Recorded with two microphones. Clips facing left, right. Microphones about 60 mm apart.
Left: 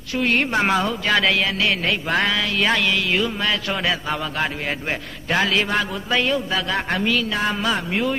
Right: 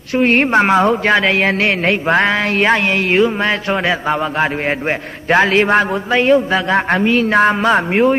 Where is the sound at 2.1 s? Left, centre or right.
Right.